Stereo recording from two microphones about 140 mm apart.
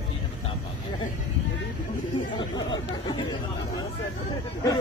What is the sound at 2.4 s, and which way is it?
Speech, 30° left (ahead or behind).